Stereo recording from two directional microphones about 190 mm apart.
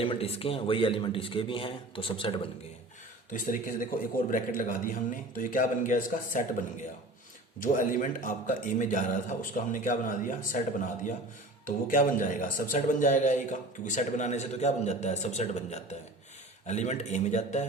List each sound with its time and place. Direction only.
0.0 s a man's voice: 30° left (ahead or behind)
3.3 s a man's voice: 45° left (ahead or behind)
7.6 s a man's voice: 45° left (ahead or behind)
11.6 s speech: 45° left (ahead or behind)